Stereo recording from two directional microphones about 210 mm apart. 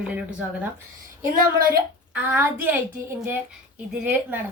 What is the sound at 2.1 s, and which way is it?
A woman's voice, 5° right (ahead or behind).